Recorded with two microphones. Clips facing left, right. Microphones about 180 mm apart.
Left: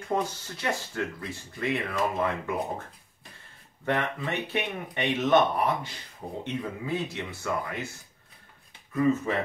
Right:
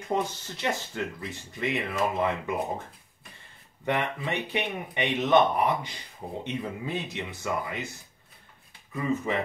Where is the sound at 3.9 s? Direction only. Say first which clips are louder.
Even; 15° right (ahead or behind).